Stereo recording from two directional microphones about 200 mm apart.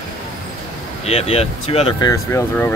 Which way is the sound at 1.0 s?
30° left (ahead or behind).